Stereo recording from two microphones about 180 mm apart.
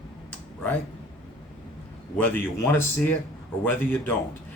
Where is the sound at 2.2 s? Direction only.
10° left (ahead or behind).